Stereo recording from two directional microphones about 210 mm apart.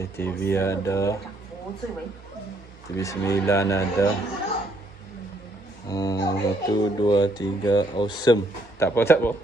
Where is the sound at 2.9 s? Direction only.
15° left (ahead or behind).